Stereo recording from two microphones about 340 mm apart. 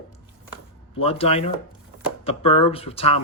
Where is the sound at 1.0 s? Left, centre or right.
Centre.